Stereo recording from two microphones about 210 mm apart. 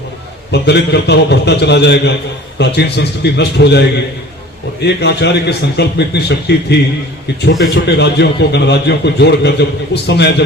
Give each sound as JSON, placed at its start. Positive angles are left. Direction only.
{"t": 0.5, "sound": "a man's voice", "side_deg": 55}